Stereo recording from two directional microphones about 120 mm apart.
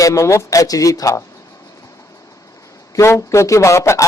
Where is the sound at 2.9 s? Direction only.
25° left (ahead or behind).